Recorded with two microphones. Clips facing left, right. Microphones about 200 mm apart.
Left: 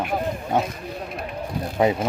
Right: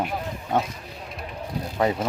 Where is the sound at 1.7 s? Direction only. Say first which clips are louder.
Left 3 dB; 15° left (ahead or behind).